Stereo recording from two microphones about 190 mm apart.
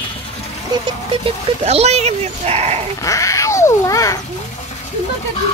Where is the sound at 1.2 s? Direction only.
35° right (ahead or behind).